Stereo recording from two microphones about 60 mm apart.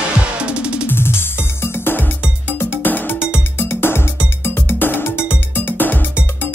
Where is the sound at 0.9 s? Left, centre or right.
Left.